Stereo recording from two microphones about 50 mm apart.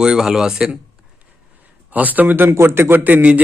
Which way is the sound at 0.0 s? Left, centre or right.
Centre.